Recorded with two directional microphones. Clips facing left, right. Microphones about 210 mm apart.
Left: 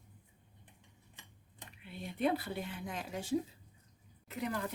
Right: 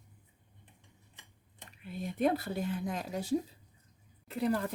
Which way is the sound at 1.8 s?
45° right (ahead or behind).